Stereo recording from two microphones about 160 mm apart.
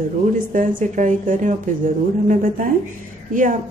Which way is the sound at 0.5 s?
55° right (ahead or behind).